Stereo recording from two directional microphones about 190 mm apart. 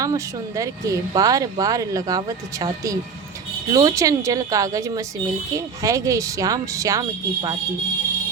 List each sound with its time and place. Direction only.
0.0 s speech: 15° right (ahead or behind)